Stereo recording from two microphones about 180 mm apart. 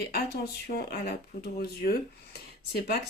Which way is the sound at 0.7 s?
60° left (ahead or behind).